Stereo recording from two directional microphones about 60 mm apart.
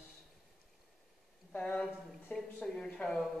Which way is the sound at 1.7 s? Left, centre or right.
Left.